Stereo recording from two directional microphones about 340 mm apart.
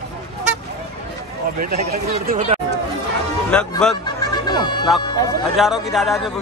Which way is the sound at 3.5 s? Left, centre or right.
Centre.